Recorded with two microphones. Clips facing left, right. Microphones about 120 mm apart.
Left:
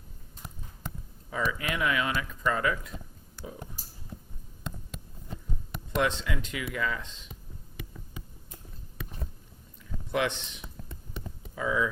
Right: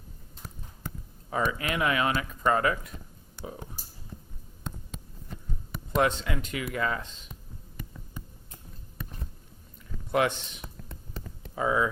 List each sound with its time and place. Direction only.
1.3 s speech: 50° right (ahead or behind)
5.9 s speech: 45° right (ahead or behind)
10.1 s speech: 45° right (ahead or behind)
11.5 s speech: 45° right (ahead or behind)